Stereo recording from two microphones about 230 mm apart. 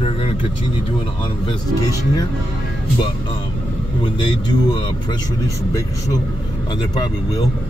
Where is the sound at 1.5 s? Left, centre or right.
Centre.